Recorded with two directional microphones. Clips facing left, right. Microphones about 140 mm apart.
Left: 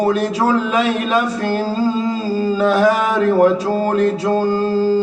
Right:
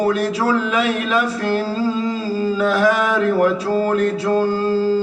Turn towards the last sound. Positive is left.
turn(degrees=35)  # may be behind; listen again after turning